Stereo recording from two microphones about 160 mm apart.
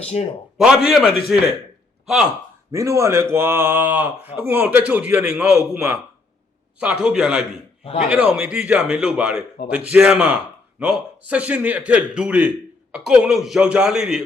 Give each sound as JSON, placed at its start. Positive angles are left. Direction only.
{"t": 0.0, "sound": "a man's voice", "side_deg": 40}
{"t": 0.6, "sound": "a man's voice", "side_deg": -5}
{"t": 2.7, "sound": "a man's voice", "side_deg": -20}
{"t": 7.0, "sound": "a man's voice", "side_deg": -5}